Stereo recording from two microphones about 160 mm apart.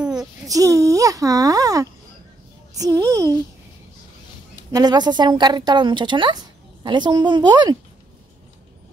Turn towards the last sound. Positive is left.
turn(degrees=-25)  # may be behind; listen again after turning